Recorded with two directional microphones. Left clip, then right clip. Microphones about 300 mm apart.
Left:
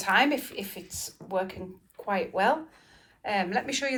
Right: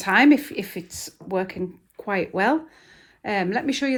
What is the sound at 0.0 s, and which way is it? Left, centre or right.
Speech, centre.